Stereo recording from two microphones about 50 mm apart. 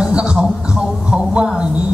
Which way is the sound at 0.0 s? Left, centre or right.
Centre.